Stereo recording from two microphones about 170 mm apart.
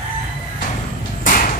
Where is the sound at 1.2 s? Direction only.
55° left (ahead or behind).